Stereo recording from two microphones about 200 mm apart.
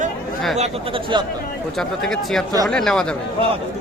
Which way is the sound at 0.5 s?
30° right (ahead or behind).